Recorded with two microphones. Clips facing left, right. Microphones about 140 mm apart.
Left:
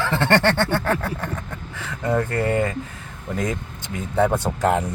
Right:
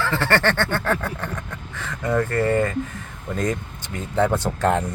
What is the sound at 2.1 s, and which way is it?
Speech, 10° left (ahead or behind).